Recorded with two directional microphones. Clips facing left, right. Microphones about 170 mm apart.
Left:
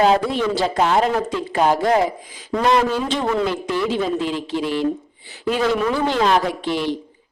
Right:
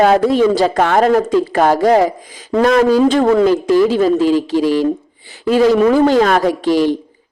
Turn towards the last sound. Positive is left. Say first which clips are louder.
# right 9 dB
turn(degrees=-40)  # may be behind; listen again after turning